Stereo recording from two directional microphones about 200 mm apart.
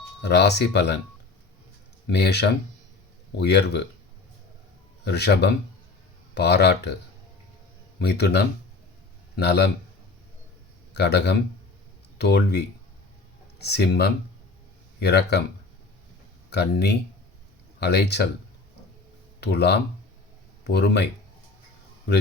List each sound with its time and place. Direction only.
0.2 s speech: 55° left (ahead or behind)
2.0 s speech: 55° left (ahead or behind)
5.0 s speech: 55° left (ahead or behind)
7.9 s a man's voice: 55° left (ahead or behind)
10.9 s speech: 55° left (ahead or behind)
16.5 s speech: 55° left (ahead or behind)
19.4 s speech: 55° left (ahead or behind)